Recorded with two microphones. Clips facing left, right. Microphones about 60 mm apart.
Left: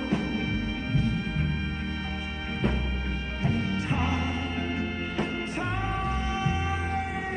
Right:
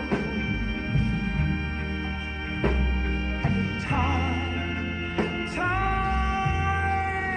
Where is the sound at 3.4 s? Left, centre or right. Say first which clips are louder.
Left 2 dB; right.